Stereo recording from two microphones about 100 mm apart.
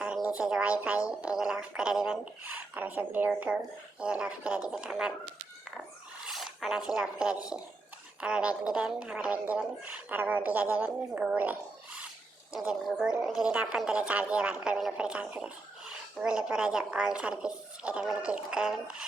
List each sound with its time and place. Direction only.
0.0 s a woman's voice: 10° right (ahead or behind)
6.2 s a woman's voice: centre (ahead or behind)